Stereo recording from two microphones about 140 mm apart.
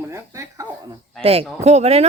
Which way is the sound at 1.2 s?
45° right (ahead or behind).